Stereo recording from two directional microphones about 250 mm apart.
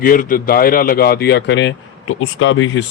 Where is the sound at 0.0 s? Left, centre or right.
Left.